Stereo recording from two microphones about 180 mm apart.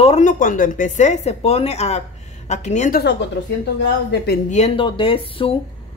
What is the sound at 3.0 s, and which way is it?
A woman's voice, 70° left (ahead or behind).